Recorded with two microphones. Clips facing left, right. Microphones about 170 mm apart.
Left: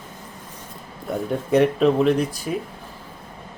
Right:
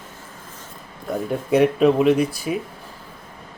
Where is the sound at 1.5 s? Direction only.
10° right (ahead or behind).